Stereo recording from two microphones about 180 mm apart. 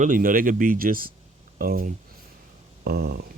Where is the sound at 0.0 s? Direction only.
50° right (ahead or behind).